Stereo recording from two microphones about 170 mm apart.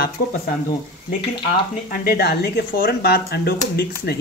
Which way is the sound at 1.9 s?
60° left (ahead or behind).